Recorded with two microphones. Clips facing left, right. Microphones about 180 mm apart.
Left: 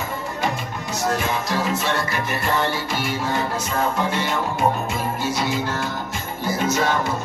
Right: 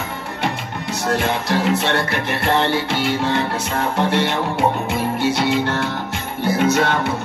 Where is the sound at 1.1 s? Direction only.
65° right (ahead or behind).